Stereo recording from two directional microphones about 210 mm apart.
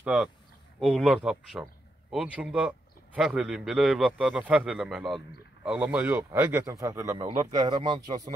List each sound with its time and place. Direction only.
0.0 s a man's voice: centre (ahead or behind); by 8.2 s 20° right (ahead or behind)